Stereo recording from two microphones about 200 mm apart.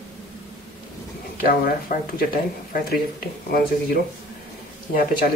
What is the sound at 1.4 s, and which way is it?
Speech, 45° left (ahead or behind).